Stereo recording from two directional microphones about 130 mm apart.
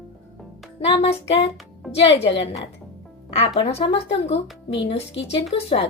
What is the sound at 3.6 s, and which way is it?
Speech, 45° left (ahead or behind).